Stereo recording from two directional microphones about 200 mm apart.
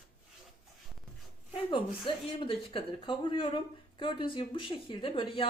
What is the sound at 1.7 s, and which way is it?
Speech, 25° left (ahead or behind).